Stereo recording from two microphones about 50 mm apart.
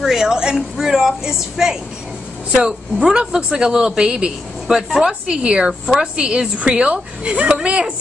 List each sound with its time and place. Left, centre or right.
0.0 s speech: centre
2.5 s speech: centre
5.2 s speech: right
5.5 s speech: centre